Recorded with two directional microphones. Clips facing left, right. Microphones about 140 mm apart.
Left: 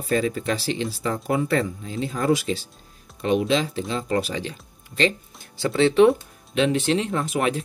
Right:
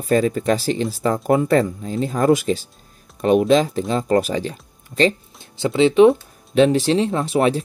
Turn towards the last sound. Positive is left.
turn(degrees=-35)  # may be behind; listen again after turning